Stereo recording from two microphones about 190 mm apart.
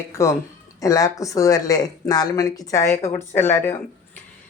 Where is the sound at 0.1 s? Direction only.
15° left (ahead or behind).